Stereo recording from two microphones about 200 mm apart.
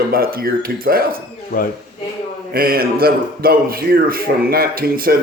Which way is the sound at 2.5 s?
50° right (ahead or behind).